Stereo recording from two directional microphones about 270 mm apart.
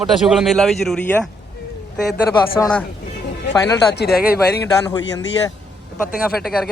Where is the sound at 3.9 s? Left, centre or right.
Left.